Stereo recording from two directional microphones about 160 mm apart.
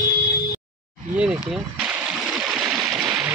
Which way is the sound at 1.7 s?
5° right (ahead or behind).